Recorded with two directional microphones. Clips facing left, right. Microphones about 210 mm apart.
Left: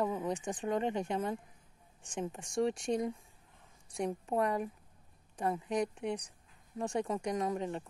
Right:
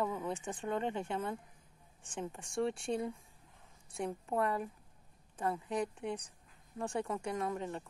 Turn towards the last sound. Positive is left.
turn(degrees=15)  # may be behind; listen again after turning